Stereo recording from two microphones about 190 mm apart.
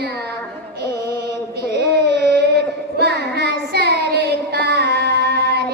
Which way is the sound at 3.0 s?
60° right (ahead or behind).